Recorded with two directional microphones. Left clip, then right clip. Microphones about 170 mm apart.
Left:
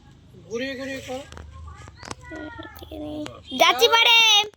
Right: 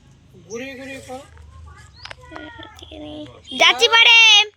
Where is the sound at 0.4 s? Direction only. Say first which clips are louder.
Left 2 dB; 40° right (ahead or behind).